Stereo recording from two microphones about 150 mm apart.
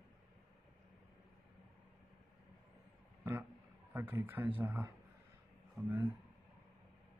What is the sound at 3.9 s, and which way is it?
Speech, 15° right (ahead or behind).